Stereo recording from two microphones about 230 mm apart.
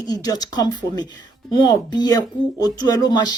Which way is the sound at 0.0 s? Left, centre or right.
Centre.